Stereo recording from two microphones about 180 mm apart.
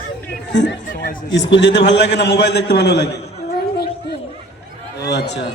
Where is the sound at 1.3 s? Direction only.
75° left (ahead or behind).